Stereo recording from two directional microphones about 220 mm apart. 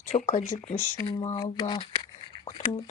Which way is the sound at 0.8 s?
15° left (ahead or behind).